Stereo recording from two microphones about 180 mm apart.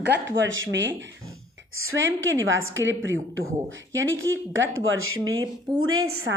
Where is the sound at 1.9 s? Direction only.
90° right.